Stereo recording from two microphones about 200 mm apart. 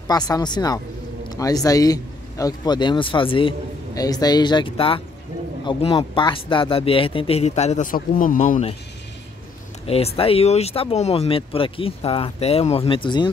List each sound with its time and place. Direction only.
0.1 s speech: 20° left (ahead or behind); by 8.7 s 35° left (ahead or behind)
9.8 s speech: 30° left (ahead or behind)